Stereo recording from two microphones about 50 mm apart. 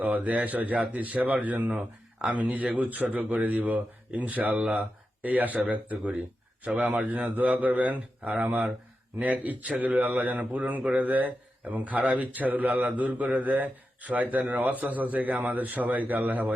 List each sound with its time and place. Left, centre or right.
0.0 s speech: right
1.7 s speech: right
4.6 s speech: right
5.3 s speech: right